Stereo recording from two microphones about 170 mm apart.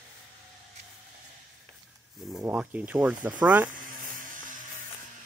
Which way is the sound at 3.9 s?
50° right (ahead or behind).